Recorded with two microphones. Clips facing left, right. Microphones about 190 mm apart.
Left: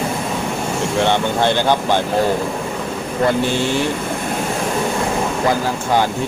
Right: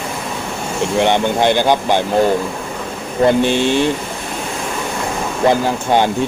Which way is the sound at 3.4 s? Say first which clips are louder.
Right 4 dB; 20° right (ahead or behind).